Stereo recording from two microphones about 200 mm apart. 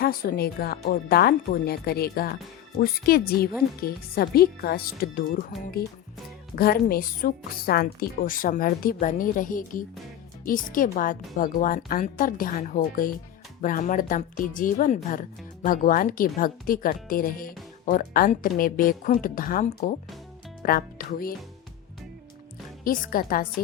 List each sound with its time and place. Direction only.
0.0 s a woman's voice: 50° left (ahead or behind)
22.8 s a woman's voice: 45° left (ahead or behind)